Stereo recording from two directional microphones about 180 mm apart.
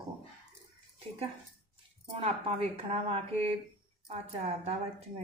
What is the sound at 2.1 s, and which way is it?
Speech, 30° right (ahead or behind).